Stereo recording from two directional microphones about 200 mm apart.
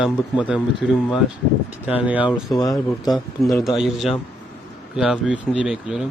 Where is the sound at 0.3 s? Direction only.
5° right (ahead or behind).